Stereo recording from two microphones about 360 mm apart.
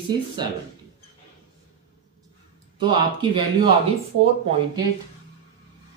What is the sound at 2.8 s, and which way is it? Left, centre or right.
Speech, centre.